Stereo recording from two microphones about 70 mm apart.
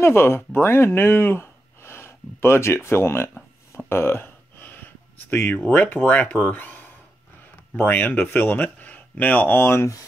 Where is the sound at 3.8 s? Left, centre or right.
Left.